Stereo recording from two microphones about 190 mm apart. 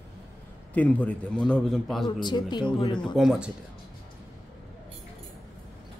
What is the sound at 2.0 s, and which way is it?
Speech, 20° left (ahead or behind).